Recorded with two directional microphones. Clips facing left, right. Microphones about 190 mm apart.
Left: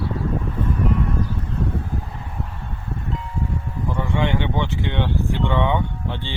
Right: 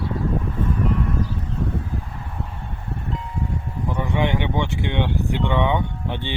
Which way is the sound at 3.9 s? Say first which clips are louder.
Even; 15° right (ahead or behind).